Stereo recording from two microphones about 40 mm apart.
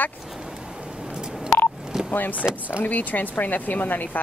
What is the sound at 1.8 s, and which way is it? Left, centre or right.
Telephone dialing, centre.